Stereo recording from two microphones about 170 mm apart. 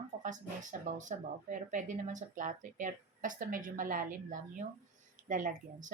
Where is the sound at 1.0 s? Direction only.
50° right (ahead or behind).